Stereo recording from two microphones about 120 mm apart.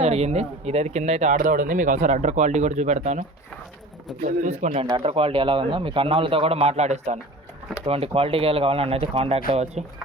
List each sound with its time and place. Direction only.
0.0 s speech: 60° right (ahead or behind)
4.3 s speech: 75° right (ahead or behind)
5.0 s speech: 50° right (ahead or behind); by 7.2 s 65° right (ahead or behind)
7.9 s speech: 55° right (ahead or behind)